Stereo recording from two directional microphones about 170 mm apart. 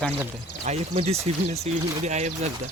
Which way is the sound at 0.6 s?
40° right (ahead or behind).